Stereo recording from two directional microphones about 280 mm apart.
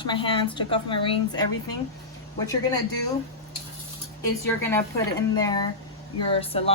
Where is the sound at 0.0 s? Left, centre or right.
Centre.